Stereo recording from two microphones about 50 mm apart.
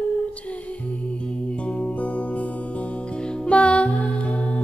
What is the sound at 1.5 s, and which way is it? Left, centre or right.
Music, left.